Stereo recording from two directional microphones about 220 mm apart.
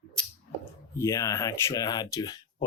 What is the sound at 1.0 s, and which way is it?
Speech, 15° left (ahead or behind).